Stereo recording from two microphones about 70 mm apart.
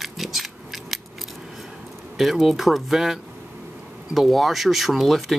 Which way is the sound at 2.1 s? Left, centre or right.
Centre.